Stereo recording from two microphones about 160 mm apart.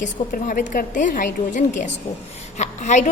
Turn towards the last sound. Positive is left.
turn(degrees=50)  # may be behind; listen again after turning